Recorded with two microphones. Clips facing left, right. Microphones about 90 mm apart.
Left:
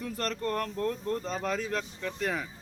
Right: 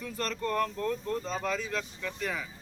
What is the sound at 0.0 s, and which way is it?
Speech, 40° left (ahead or behind).